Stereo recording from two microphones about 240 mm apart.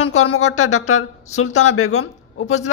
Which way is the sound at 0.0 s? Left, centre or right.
Left.